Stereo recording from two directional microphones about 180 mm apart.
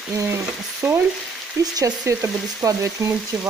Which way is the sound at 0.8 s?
10° right (ahead or behind).